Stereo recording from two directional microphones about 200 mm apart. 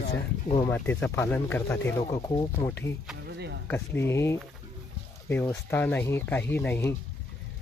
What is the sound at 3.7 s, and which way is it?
Speech, 10° left (ahead or behind).